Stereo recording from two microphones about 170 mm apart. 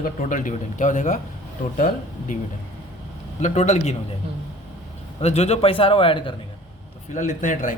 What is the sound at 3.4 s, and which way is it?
Speech, 40° left (ahead or behind).